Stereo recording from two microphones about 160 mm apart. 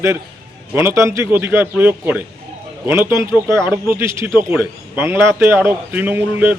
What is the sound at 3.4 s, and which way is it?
Speech, 25° left (ahead or behind).